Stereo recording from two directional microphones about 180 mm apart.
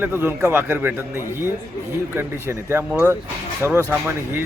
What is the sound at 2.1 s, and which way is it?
Speech, 15° right (ahead or behind).